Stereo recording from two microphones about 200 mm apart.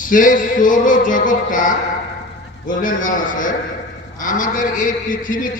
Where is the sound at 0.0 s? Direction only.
40° left (ahead or behind).